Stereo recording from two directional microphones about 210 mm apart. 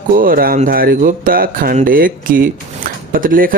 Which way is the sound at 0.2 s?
45° right (ahead or behind).